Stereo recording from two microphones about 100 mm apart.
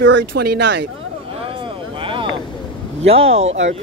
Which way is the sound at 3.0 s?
85° right.